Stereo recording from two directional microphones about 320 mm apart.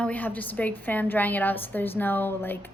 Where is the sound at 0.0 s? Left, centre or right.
Centre.